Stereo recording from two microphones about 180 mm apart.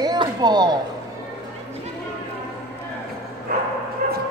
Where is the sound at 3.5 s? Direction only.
55° right (ahead or behind).